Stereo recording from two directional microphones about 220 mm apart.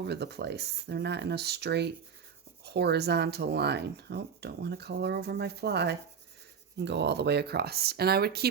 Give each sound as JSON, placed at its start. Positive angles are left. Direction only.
{"t": 0.0, "sound": "speech", "side_deg": -50}